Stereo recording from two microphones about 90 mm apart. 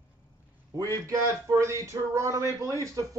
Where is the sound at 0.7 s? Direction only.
35° right (ahead or behind).